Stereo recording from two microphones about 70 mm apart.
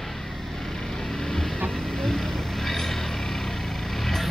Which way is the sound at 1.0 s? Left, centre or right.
Centre.